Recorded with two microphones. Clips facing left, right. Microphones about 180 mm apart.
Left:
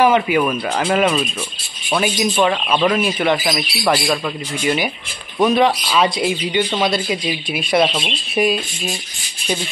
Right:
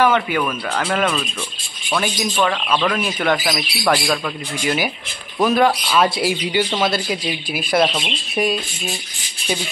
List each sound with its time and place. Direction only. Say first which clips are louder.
0.0 s speech: left 3 dB; 10° left (ahead or behind)
5.4 s speech: left 1 dB; centre (ahead or behind)